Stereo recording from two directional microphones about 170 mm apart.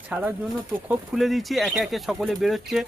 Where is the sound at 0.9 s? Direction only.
Centre (ahead or behind).